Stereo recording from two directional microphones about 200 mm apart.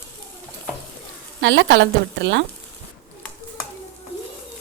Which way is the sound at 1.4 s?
65° right (ahead or behind).